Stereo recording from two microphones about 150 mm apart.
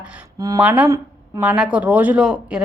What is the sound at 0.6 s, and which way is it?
Speech, 10° right (ahead or behind).